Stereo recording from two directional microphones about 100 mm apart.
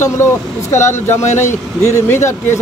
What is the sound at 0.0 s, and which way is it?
Speech, 25° left (ahead or behind).